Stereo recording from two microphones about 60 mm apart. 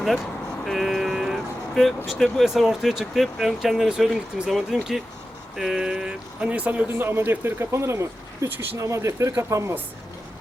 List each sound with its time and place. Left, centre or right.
0.6 s vehicle: centre
2.1 s speech: centre; by 6.8 s right
6.8 s a man's voice: right
7.7 s speech: right